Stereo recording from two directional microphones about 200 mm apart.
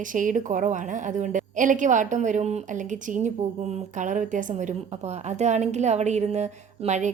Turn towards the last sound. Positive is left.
turn(degrees=-35)  # may be behind; listen again after turning